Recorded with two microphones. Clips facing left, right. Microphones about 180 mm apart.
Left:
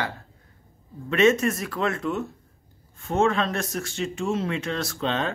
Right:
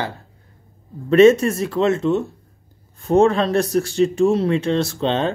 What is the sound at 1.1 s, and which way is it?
Speech, 35° right (ahead or behind).